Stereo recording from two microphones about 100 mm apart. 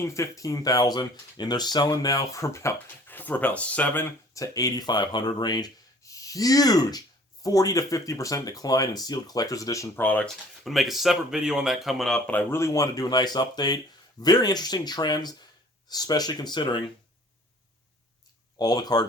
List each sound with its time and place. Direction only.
0.0 s speech: 30° left (ahead or behind)
2.8 s speech: 20° left (ahead or behind)
4.4 s speech: 35° left (ahead or behind)
10.0 s speech: 15° left (ahead or behind)
10.2 s speech: centre (ahead or behind)
12.3 s speech: 20° left (ahead or behind); by 16.8 s 50° left (ahead or behind)
18.5 s speech: 40° left (ahead or behind)